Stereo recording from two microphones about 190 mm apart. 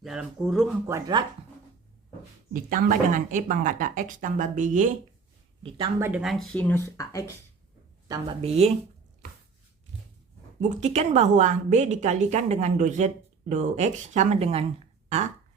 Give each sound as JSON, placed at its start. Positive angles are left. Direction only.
{"t": 0.0, "sound": "speech", "side_deg": 0}
{"t": 0.9, "sound": "speech", "side_deg": -15}
{"t": 2.5, "sound": "speech", "side_deg": -45}
{"t": 5.6, "sound": "speech", "side_deg": -30}
{"t": 6.0, "sound": "speech", "side_deg": -5}
{"t": 8.0, "sound": "a woman's voice", "side_deg": -20}
{"t": 8.4, "sound": "a woman's voice", "side_deg": -35}
{"t": 10.6, "sound": "a woman's voice", "side_deg": -40}